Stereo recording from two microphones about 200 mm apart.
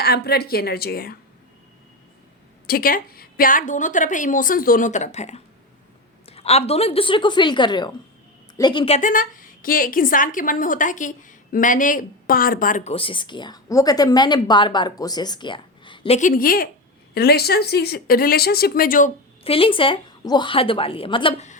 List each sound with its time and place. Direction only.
0.0 s speech: 50° left (ahead or behind)
2.6 s a woman's voice: 45° left (ahead or behind)
19.5 s a woman's voice: 25° left (ahead or behind)